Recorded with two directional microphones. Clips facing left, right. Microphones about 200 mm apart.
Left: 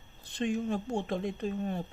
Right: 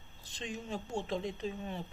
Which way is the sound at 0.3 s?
55° left (ahead or behind).